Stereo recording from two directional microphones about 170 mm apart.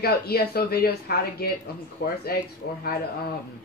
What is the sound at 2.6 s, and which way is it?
Speech, 75° left (ahead or behind).